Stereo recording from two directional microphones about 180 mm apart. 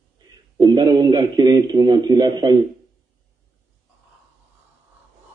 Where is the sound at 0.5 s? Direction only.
25° right (ahead or behind).